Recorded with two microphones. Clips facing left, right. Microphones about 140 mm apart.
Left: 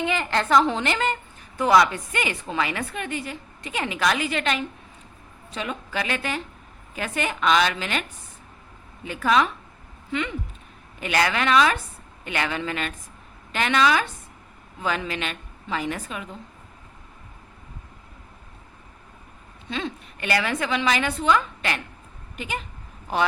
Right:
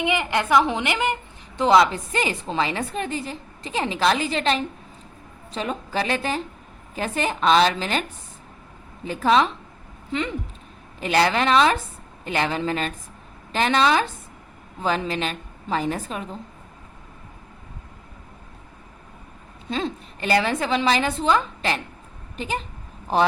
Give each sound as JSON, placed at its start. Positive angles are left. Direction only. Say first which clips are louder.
{"t": 0.0, "sound": "a woman's voice", "louder": "right 1 dB", "side_deg": -15}
{"t": 9.0, "sound": "a woman's voice", "louder": "right 2 dB", "side_deg": -35}
{"t": 19.7, "sound": "a woman's voice", "louder": "right 3 dB", "side_deg": -35}